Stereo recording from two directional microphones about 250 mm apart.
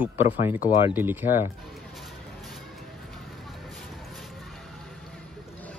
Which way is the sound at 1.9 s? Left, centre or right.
Centre.